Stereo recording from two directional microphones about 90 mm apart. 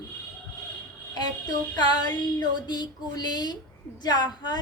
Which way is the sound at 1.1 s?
50° left (ahead or behind).